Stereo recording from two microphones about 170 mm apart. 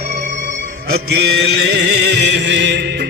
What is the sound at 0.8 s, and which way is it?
Music, 70° right (ahead or behind).